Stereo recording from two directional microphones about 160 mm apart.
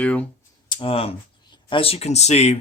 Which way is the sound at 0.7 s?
35° left (ahead or behind).